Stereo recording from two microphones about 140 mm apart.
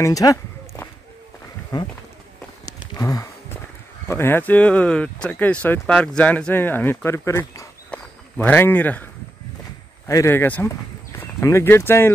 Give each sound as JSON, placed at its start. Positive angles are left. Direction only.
{"t": 0.0, "sound": "speech", "side_deg": 25}
{"t": 2.8, "sound": "a sound", "side_deg": 25}
{"t": 4.1, "sound": "speech", "side_deg": 15}
{"t": 7.9, "sound": "walk", "side_deg": 10}
{"t": 10.0, "sound": "speech", "side_deg": 20}